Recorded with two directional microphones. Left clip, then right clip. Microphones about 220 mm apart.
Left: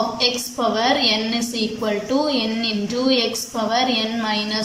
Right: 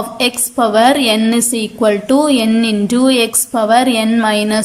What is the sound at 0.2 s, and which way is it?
A woman's voice, 40° right (ahead or behind).